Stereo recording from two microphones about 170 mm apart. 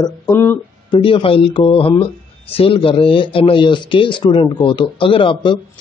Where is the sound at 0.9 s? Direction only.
30° left (ahead or behind).